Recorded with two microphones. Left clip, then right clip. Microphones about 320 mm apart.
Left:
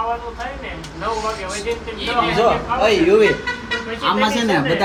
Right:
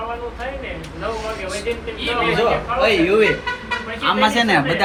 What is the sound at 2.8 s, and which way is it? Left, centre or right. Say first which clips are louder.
Speech: left 2 dB; centre.